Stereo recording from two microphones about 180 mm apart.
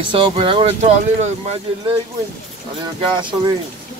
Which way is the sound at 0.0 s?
30° right (ahead or behind).